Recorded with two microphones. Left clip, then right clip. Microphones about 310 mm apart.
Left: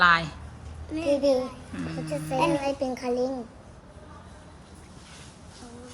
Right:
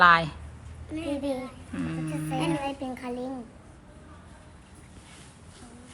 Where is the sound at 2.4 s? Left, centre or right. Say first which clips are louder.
Left 6 dB; left.